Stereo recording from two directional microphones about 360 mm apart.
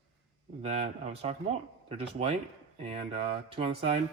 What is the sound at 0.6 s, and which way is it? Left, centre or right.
Speech, centre.